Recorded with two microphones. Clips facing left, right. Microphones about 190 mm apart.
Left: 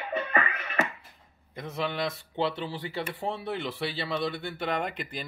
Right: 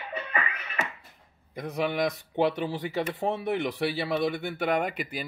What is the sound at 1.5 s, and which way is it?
Speech, 15° right (ahead or behind).